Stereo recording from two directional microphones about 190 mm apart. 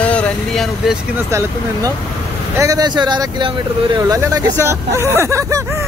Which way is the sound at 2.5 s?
15° right (ahead or behind).